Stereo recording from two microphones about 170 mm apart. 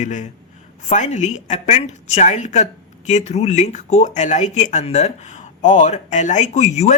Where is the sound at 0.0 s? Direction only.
45° left (ahead or behind).